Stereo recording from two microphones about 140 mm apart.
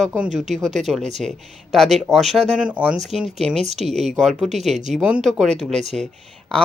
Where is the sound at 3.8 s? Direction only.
Centre (ahead or behind).